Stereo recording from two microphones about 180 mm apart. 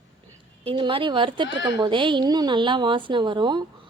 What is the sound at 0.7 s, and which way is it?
A woman's voice, 30° right (ahead or behind).